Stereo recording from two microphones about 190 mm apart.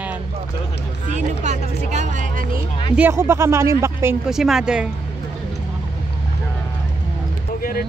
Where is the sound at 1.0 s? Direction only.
40° right (ahead or behind).